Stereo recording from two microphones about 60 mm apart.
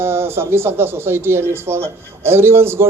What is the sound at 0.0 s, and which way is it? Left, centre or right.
Speech, right.